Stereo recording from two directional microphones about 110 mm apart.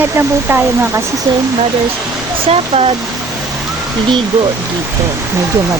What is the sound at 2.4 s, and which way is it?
Speech, 60° right (ahead or behind).